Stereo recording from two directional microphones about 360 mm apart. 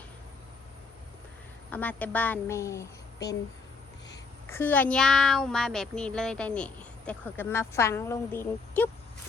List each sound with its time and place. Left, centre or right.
1.7 s a child's voice: centre
4.5 s a child's voice: centre